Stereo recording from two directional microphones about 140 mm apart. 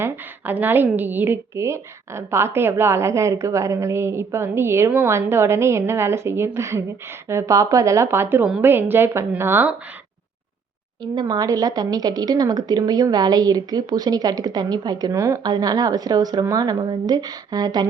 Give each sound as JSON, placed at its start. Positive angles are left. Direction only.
{"t": 0.0, "sound": "a woman's voice", "side_deg": -15}
{"t": 11.0, "sound": "a woman's voice", "side_deg": -30}